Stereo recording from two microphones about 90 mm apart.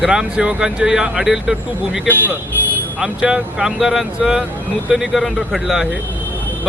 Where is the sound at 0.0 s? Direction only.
10° right (ahead or behind).